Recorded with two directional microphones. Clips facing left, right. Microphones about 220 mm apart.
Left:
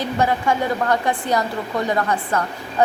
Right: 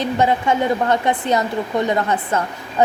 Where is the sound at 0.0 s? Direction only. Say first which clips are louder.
Right 2 dB; 20° right (ahead or behind).